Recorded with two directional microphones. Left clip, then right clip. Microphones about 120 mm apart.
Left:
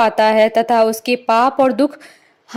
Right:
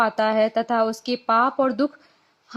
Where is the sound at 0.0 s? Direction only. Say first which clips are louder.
Left 8 dB; 50° left (ahead or behind).